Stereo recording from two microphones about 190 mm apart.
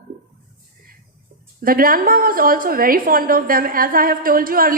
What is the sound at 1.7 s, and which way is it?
A woman's voice, 50° right (ahead or behind).